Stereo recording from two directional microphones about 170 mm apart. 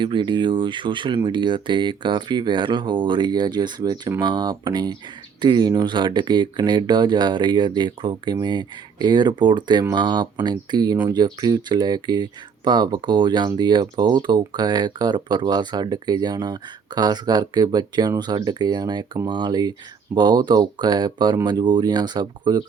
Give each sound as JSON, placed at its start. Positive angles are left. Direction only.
{"t": 0.0, "sound": "speech", "side_deg": -25}